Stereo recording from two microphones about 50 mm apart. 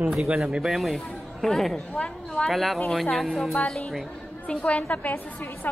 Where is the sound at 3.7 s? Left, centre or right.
Centre; by 5.7 s left.